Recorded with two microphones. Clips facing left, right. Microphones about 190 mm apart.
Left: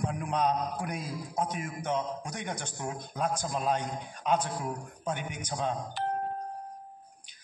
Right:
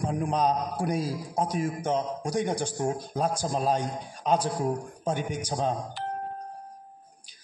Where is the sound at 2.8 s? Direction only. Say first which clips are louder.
Right 8 dB; 45° right (ahead or behind).